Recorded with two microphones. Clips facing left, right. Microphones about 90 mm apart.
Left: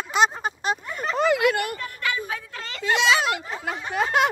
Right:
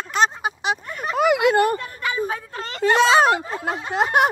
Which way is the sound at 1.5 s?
35° right (ahead or behind).